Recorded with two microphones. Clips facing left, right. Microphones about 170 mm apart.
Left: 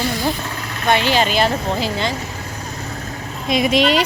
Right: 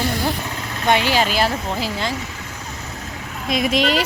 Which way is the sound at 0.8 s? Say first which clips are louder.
Left 1 dB; 15° right (ahead or behind).